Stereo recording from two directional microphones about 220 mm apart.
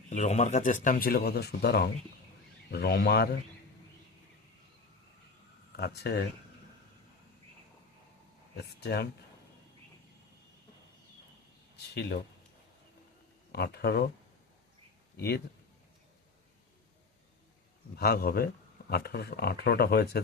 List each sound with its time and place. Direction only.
0.1 s speech: 30° left (ahead or behind)
5.7 s speech: 45° left (ahead or behind)
8.5 s speech: 50° left (ahead or behind)
11.9 s speech: 50° left (ahead or behind)
13.5 s speech: 45° left (ahead or behind)
17.9 s speech: 45° left (ahead or behind)